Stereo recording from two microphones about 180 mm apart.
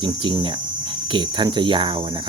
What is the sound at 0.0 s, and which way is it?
Cricket, 25° right (ahead or behind).